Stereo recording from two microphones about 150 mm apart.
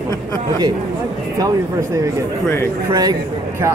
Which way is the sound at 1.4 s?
25° right (ahead or behind).